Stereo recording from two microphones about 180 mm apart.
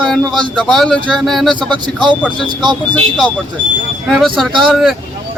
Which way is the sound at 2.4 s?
25° right (ahead or behind).